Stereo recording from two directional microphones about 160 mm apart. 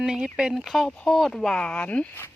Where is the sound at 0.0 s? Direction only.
5° right (ahead or behind).